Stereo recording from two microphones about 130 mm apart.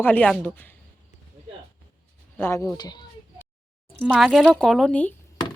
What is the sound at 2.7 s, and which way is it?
Speech, 30° left (ahead or behind).